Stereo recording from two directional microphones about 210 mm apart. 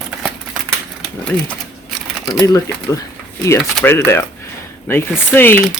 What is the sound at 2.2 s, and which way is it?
Speech, 20° left (ahead or behind).